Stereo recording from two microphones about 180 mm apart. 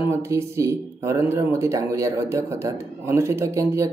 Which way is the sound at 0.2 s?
15° right (ahead or behind).